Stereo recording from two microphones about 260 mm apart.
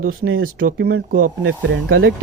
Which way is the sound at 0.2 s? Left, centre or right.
Right.